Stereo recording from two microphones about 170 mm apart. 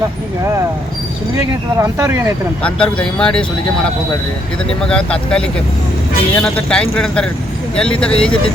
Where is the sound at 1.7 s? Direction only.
15° right (ahead or behind).